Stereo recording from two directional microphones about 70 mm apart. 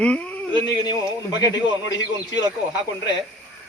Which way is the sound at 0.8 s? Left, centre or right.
Left.